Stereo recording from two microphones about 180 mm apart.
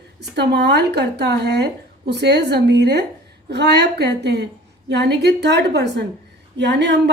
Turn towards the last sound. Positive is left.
turn(degrees=-70)  # may be behind; listen again after turning